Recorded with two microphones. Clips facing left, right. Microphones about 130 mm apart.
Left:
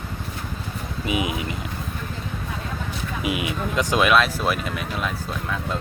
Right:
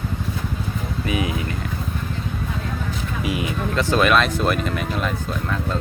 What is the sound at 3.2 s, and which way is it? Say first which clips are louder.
Speech: right 1 dB; 15° left (ahead or behind).